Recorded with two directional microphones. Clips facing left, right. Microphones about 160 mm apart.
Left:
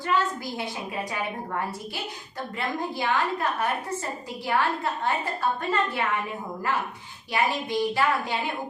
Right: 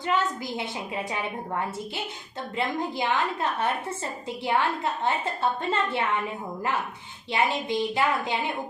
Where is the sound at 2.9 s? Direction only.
20° right (ahead or behind).